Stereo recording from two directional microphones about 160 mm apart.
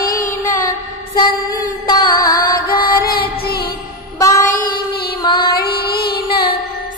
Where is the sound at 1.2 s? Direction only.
25° left (ahead or behind).